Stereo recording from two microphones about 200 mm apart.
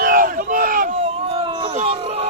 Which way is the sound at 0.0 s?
45° right (ahead or behind).